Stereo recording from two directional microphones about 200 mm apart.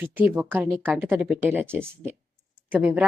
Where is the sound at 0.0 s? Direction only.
10° right (ahead or behind).